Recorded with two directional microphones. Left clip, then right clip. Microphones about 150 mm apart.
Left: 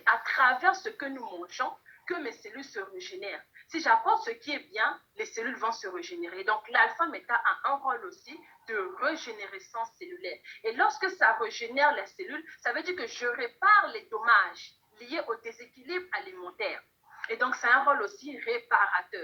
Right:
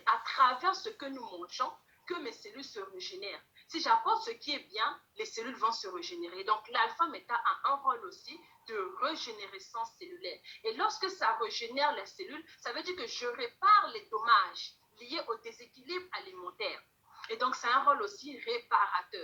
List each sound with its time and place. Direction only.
0.0 s a woman's voice: 30° left (ahead or behind)